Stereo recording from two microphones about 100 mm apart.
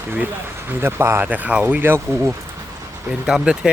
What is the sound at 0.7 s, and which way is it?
Speech, 20° right (ahead or behind).